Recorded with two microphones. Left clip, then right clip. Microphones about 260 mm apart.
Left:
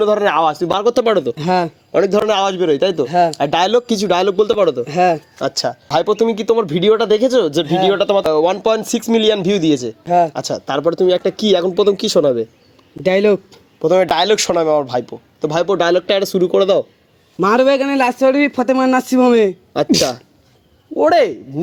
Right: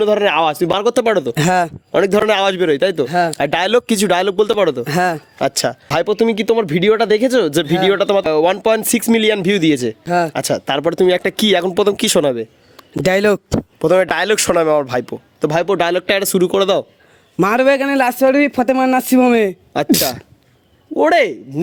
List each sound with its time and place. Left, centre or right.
0.0 s speech: right
1.4 s speech: right
1.9 s a man's voice: right
17.4 s a man's voice: right
20.9 s speech: right